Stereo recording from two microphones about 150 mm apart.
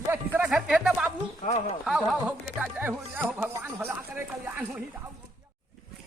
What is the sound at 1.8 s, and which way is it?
Speech, centre (ahead or behind).